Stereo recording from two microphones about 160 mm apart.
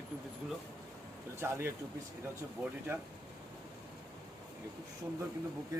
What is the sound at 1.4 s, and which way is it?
Speech, 15° right (ahead or behind).